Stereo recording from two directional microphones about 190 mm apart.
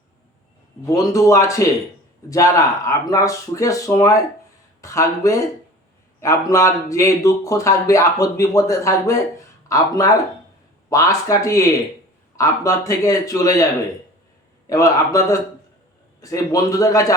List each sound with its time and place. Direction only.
0.9 s a man's voice: 15° left (ahead or behind)
14.7 s a man's voice: 15° left (ahead or behind)